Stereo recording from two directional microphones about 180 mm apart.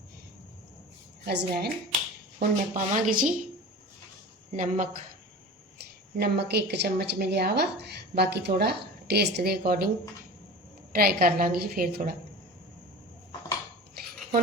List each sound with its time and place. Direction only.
1.2 s speech: 65° right (ahead or behind)
2.4 s speech: 50° right (ahead or behind)
4.5 s speech: 45° right (ahead or behind)
6.1 s speech: 65° right (ahead or behind)
10.9 s speech: 55° right (ahead or behind)